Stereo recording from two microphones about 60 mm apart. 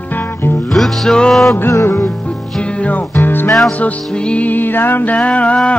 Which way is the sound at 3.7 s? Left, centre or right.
Left.